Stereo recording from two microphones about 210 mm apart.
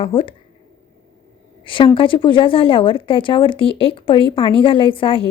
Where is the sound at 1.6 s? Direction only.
25° left (ahead or behind).